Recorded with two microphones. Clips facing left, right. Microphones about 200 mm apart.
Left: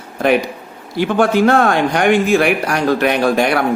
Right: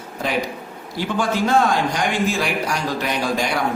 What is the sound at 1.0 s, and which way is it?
Speech, 60° left (ahead or behind).